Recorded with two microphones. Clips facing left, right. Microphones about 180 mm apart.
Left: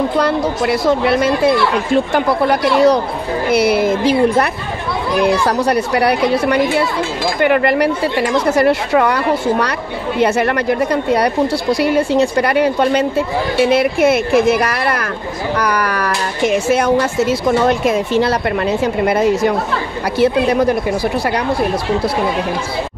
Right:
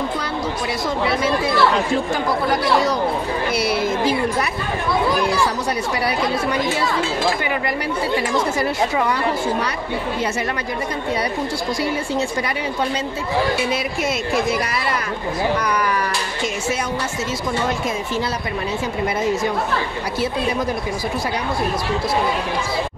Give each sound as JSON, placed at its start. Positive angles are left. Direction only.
{"t": 0.2, "sound": "speech", "side_deg": 65}
{"t": 5.5, "sound": "speech", "side_deg": 65}